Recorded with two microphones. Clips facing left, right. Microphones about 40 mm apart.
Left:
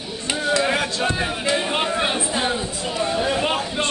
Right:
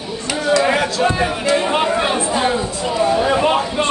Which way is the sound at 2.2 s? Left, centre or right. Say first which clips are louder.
Right 5 dB; centre.